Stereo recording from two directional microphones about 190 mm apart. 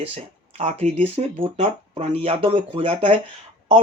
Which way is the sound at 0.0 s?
30° right (ahead or behind).